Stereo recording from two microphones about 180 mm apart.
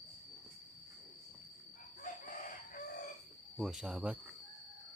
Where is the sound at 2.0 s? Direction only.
50° left (ahead or behind).